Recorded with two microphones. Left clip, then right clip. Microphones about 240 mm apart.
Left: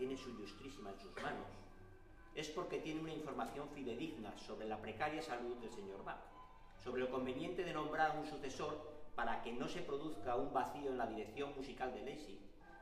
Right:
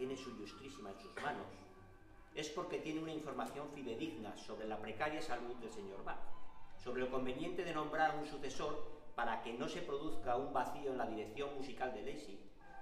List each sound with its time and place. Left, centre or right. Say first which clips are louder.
0.0 s television: right 1 dB; centre
1.2 s speech: right 3 dB; centre
2.3 s speech: right 1 dB; centre